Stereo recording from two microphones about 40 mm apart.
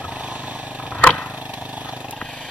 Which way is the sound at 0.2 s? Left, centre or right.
Right.